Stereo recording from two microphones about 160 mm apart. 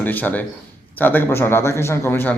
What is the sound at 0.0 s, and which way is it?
A man's voice, 10° left (ahead or behind).